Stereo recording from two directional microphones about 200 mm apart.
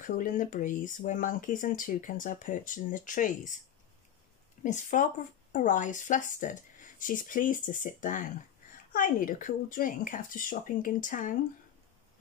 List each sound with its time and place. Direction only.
0.0 s speech: 40° left (ahead or behind)
4.6 s speech: 40° left (ahead or behind)